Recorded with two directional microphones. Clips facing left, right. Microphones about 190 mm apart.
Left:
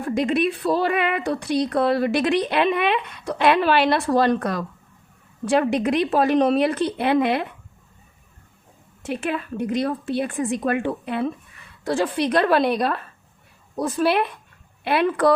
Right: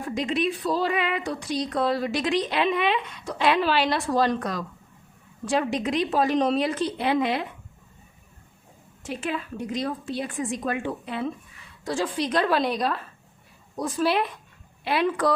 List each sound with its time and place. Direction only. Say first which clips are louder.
0.1 s a woman's voice: left 5 dB; 60° left (ahead or behind)
9.0 s a woman's voice: left 4 dB; 60° left (ahead or behind)